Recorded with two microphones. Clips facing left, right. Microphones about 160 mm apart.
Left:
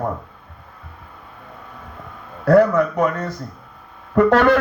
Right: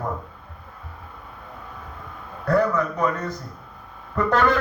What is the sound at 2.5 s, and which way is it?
A man's voice, 70° left (ahead or behind).